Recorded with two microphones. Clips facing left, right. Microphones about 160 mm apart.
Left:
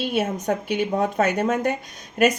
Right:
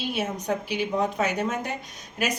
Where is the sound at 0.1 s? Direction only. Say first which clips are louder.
Left 3 dB; 55° left (ahead or behind).